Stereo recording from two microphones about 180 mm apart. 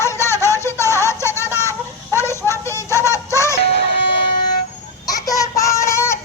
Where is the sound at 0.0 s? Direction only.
15° left (ahead or behind).